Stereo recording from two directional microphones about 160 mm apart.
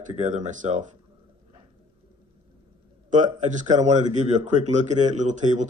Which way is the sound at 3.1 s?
50° right (ahead or behind).